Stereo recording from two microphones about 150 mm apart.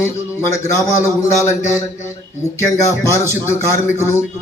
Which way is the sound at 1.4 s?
20° left (ahead or behind).